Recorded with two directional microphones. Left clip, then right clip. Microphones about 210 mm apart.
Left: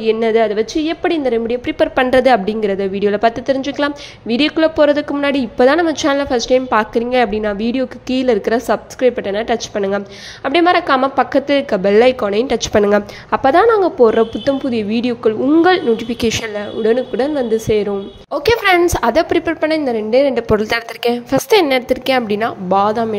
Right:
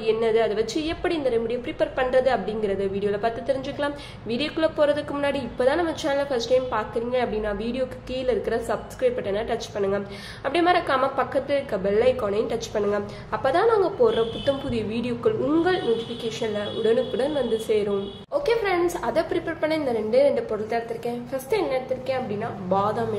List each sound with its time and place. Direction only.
0.0 s a woman's voice: 35° left (ahead or behind)
12.7 s a woman's voice: 50° left (ahead or behind)
22.7 s a woman's voice: 35° left (ahead or behind)